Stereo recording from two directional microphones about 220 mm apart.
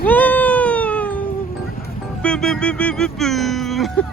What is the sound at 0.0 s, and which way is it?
Cat, 5° left (ahead or behind).